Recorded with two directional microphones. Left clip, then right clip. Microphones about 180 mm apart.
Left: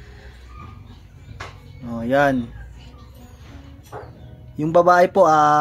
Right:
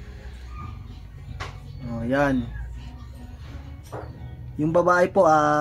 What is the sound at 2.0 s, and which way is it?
Speech, 55° left (ahead or behind).